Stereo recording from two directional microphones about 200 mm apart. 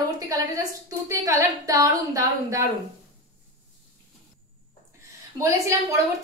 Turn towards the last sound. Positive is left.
turn(degrees=-15)  # may be behind; listen again after turning